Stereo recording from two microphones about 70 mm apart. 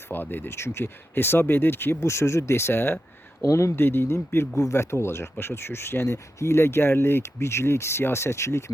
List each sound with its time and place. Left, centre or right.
0.1 s speech: left
3.4 s speech: left
4.5 s speech: left